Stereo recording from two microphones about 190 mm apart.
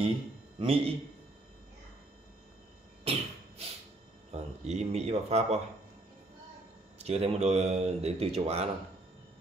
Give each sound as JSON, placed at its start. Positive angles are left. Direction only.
{"t": 0.6, "sound": "a man's voice", "side_deg": -30}
{"t": 3.0, "sound": "a sound", "side_deg": -30}
{"t": 4.3, "sound": "speech", "side_deg": -35}
{"t": 7.0, "sound": "speech", "side_deg": -30}